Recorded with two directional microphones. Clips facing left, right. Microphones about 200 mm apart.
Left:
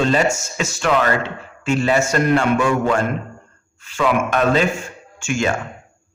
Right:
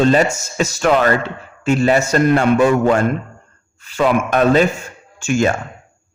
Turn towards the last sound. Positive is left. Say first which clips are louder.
# right 4 dB
turn(degrees=-40)  # may be behind; listen again after turning